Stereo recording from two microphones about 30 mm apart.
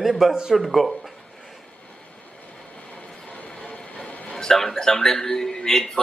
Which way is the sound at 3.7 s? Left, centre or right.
Left.